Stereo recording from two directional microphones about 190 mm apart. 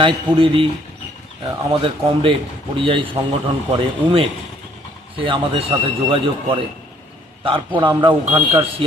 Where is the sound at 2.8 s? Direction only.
25° right (ahead or behind).